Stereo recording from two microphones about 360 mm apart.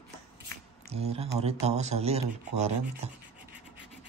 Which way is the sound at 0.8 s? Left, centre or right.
Centre.